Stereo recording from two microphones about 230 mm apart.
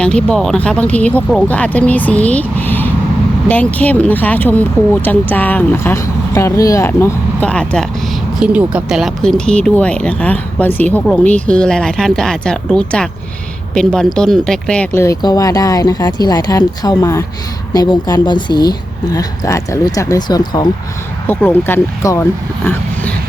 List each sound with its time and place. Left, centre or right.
0.0 s speech: centre